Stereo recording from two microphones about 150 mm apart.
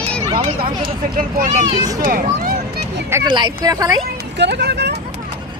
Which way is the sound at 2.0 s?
75° right (ahead or behind).